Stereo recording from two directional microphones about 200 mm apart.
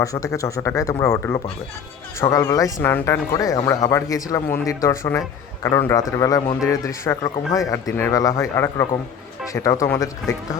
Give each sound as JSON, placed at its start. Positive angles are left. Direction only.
{"t": 0.0, "sound": "speech", "side_deg": 15}